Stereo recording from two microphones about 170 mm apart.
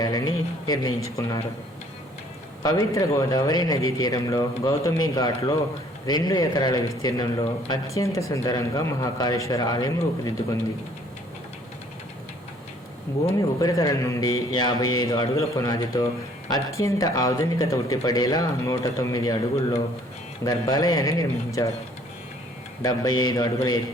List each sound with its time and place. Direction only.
0.0 s speech: 25° left (ahead or behind)
2.6 s speech: 20° left (ahead or behind)
13.6 s speech: 20° left (ahead or behind)
22.8 s speech: 25° left (ahead or behind)